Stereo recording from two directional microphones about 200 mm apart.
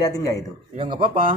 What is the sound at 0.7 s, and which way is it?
Speech, 25° right (ahead or behind).